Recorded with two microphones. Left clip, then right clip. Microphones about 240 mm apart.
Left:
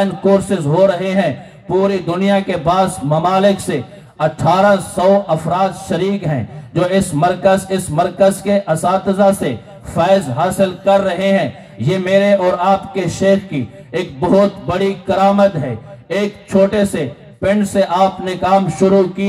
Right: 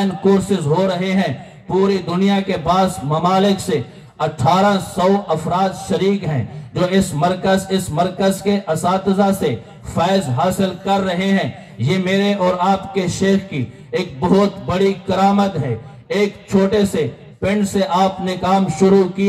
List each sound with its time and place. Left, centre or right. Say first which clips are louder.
0.0 s a man's voice: left 3 dB; right
16.5 s a man's voice: left 3 dB; right